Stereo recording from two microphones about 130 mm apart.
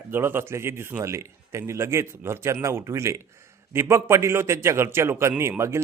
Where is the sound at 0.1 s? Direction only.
15° right (ahead or behind).